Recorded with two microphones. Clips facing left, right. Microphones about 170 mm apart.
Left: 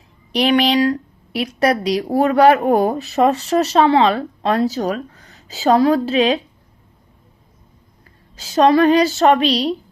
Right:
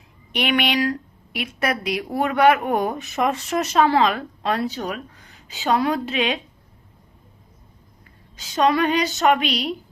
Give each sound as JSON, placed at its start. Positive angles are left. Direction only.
{"t": 0.3, "sound": "a woman's voice", "side_deg": 35}
{"t": 8.4, "sound": "a woman's voice", "side_deg": 35}